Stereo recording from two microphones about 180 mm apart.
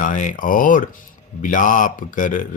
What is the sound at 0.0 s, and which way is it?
Speech, 45° left (ahead or behind).